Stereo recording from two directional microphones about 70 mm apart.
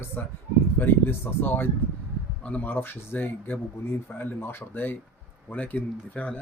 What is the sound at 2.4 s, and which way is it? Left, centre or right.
Speech, centre.